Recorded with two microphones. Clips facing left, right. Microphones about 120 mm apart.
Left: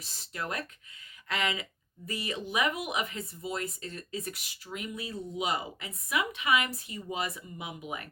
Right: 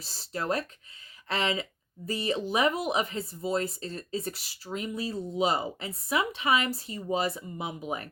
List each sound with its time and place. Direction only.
0.0 s speech: 35° right (ahead or behind)